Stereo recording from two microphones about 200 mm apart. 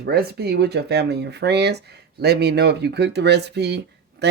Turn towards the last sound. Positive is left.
turn(degrees=-55)  # may be behind; listen again after turning